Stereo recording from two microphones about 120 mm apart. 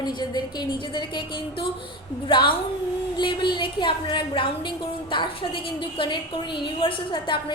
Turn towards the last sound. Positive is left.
turn(degrees=45)  # may be behind; listen again after turning